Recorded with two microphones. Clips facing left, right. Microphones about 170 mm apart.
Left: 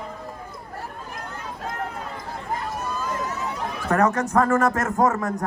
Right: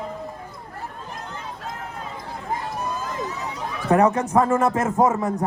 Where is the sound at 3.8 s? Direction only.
15° right (ahead or behind).